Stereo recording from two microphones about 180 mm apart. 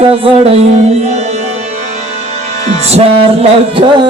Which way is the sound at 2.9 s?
35° right (ahead or behind).